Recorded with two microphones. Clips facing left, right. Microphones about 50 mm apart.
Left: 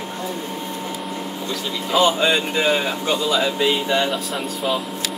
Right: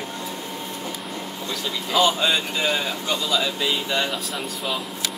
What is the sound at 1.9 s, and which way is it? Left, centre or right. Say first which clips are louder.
Speech: left 3 dB; left.